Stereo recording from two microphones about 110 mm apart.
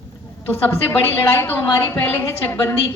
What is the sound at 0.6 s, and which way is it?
Speech, 20° left (ahead or behind).